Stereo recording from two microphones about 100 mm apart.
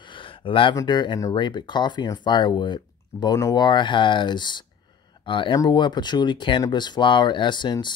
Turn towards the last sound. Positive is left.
turn(degrees=50)  # may be behind; listen again after turning